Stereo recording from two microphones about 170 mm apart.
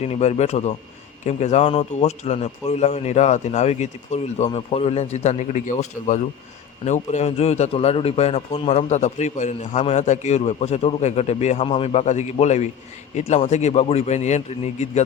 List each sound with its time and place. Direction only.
0.0 s a man's voice: 40° left (ahead or behind)